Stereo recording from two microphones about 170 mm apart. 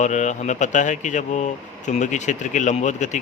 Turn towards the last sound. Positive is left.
turn(degrees=45)  # may be behind; listen again after turning